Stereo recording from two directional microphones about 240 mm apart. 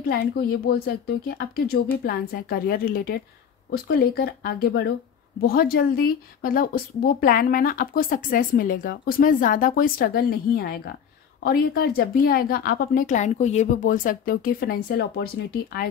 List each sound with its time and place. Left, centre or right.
0.1 s speech: left